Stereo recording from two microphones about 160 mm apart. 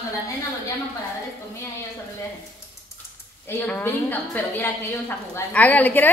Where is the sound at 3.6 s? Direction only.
10° left (ahead or behind).